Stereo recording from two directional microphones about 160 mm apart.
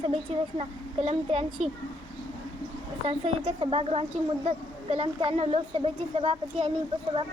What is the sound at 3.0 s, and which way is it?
Speech, 35° right (ahead or behind).